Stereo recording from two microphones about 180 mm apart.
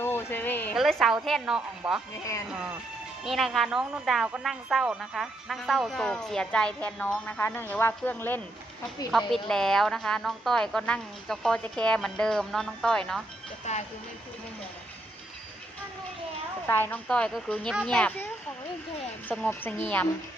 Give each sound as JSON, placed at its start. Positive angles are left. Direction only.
{"t": 0.0, "sound": "a sound", "side_deg": 15}
{"t": 0.7, "sound": "a woman's voice", "side_deg": 0}
{"t": 13.7, "sound": "speech", "side_deg": 40}
{"t": 16.6, "sound": "a woman's voice", "side_deg": 10}
{"t": 19.3, "sound": "a woman's voice", "side_deg": 10}